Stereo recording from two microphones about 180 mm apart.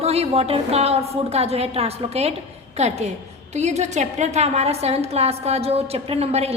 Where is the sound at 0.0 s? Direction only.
35° right (ahead or behind).